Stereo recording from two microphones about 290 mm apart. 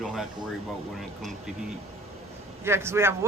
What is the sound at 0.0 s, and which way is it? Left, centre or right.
Speech, centre.